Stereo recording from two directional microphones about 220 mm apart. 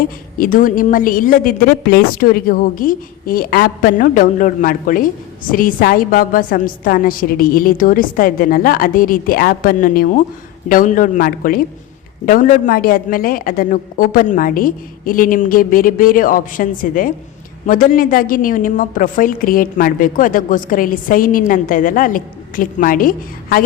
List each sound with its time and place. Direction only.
0.0 s a woman's voice: 40° left (ahead or behind)